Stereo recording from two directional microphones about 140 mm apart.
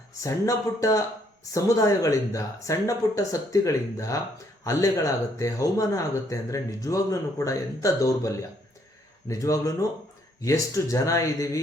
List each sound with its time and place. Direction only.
0.2 s speech: 25° left (ahead or behind)
9.3 s speech: 25° left (ahead or behind)